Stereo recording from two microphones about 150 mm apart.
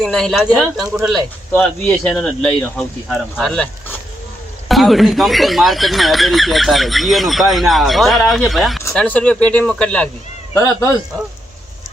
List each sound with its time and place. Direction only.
0.0 s speech: 5° left (ahead or behind)
1.5 s speech: 10° left (ahead or behind)
4.7 s speech: centre (ahead or behind)
10.5 s a man's voice: 20° left (ahead or behind)